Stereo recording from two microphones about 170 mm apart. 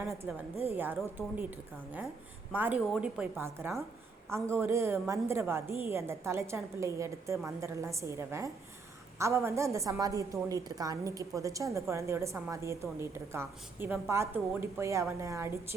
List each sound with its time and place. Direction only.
0.7 s a woman's voice: 10° right (ahead or behind)